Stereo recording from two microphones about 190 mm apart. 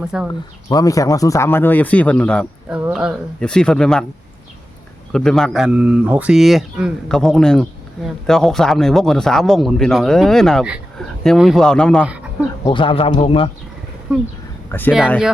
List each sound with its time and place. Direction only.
0.1 s speech: 5° right (ahead or behind)
0.7 s a man's voice: 20° left (ahead or behind)
2.6 s speech: 5° right (ahead or behind)
5.1 s speech: 5° left (ahead or behind)
12.6 s speech: 25° left (ahead or behind)
14.7 s a man's voice: 10° left (ahead or behind)